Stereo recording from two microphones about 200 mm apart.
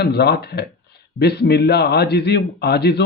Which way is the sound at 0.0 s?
55° left (ahead or behind).